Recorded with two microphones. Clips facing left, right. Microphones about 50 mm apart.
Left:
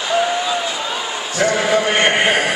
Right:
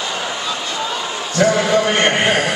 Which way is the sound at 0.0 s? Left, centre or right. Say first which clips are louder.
Left 5 dB; centre.